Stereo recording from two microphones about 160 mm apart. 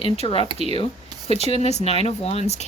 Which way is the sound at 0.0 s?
35° left (ahead or behind).